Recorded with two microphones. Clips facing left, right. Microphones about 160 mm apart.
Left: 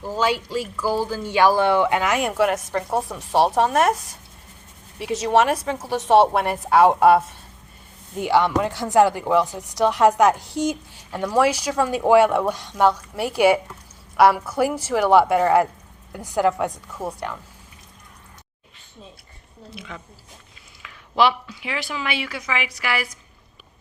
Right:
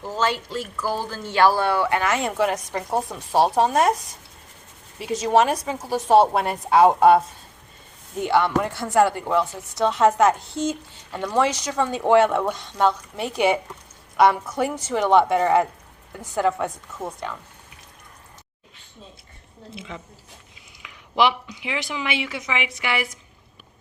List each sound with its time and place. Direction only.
0.0 s a woman's voice: 10° left (ahead or behind)
8.2 s a woman's voice: 15° left (ahead or behind)
19.7 s speech: 25° right (ahead or behind)